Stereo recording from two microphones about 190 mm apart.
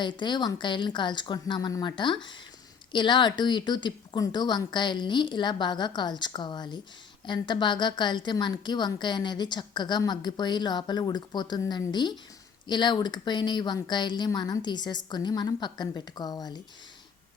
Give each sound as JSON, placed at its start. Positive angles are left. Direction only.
{"t": 0.0, "sound": "a woman's voice", "side_deg": 25}